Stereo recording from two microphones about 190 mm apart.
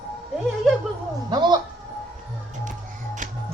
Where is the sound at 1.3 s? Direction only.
25° right (ahead or behind).